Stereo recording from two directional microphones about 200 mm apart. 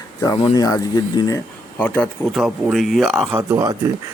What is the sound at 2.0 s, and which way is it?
Speech, centre (ahead or behind).